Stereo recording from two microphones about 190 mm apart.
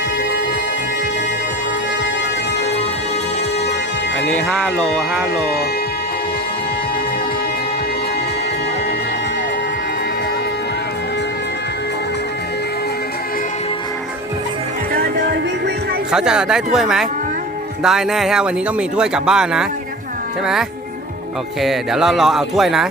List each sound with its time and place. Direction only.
4.3 s speech: 5° left (ahead or behind)
14.9 s music: 55° right (ahead or behind)
16.1 s speech: 5° right (ahead or behind)
21.6 s speech: centre (ahead or behind)